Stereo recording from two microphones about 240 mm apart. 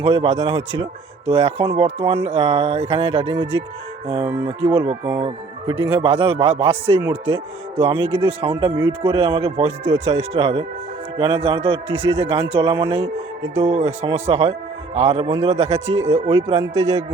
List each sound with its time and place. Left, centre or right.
0.0 s speech: right